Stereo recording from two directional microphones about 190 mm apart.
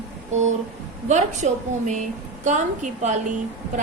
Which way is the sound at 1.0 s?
40° right (ahead or behind).